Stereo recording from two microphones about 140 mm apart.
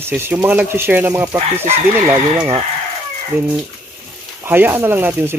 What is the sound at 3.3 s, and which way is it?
Speech, 15° right (ahead or behind).